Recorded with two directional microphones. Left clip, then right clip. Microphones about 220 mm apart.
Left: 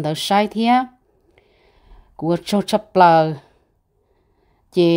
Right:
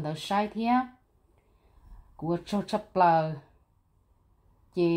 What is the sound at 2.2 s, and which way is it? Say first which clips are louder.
Speech: left 11 dB; 45° left (ahead or behind).